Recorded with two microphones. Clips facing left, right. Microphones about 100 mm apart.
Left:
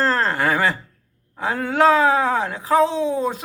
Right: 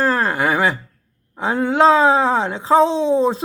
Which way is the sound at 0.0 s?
10° right (ahead or behind).